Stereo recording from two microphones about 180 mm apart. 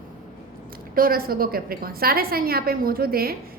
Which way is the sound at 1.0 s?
55° right (ahead or behind).